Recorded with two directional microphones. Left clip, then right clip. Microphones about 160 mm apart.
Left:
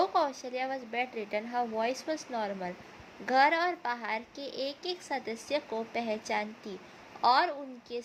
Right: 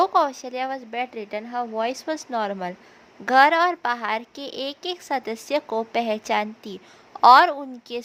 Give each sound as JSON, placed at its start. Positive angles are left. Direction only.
{"t": 0.0, "sound": "a woman's voice", "side_deg": -40}